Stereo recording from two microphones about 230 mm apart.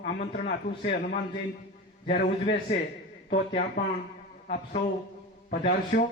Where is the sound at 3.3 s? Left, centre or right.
Left.